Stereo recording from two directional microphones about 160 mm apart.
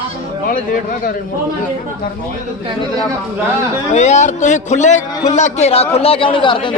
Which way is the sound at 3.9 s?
45° left (ahead or behind).